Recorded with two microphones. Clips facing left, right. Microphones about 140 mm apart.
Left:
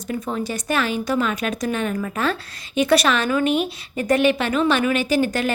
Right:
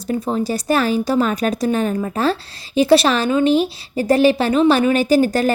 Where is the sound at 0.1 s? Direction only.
35° right (ahead or behind).